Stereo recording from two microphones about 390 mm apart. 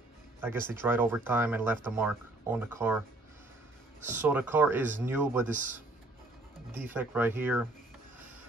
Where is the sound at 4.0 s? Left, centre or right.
Centre.